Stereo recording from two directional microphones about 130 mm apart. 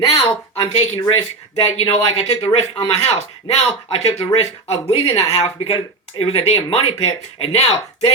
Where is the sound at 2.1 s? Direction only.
55° left (ahead or behind).